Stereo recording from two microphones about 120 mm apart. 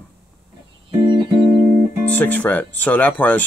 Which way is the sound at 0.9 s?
40° right (ahead or behind).